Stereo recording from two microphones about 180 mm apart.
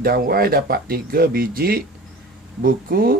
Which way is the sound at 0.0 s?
55° right (ahead or behind).